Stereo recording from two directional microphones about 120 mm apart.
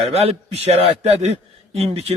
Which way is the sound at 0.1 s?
60° right (ahead or behind).